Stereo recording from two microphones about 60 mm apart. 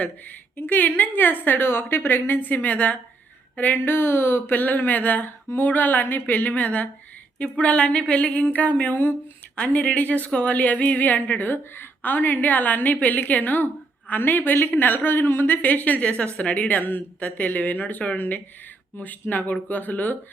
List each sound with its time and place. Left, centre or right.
0.0 s a woman's voice: left